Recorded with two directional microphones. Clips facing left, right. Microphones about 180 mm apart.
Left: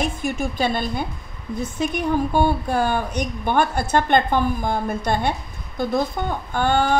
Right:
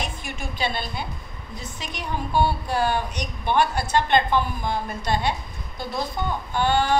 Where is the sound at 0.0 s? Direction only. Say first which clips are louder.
Left 9 dB; 45° left (ahead or behind).